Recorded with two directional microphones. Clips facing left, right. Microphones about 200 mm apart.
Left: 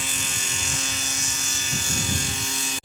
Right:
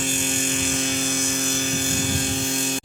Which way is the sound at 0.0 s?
50° right (ahead or behind).